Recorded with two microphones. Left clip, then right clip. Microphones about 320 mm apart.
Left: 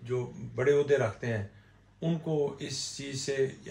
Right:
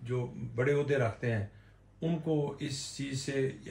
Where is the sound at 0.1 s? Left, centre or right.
Centre.